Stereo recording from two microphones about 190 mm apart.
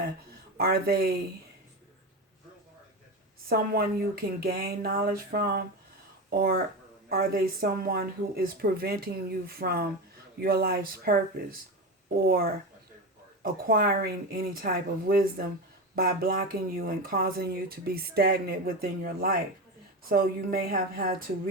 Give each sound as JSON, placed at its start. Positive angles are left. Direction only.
{"t": 0.5, "sound": "speech", "side_deg": -55}
{"t": 3.5, "sound": "speech", "side_deg": -50}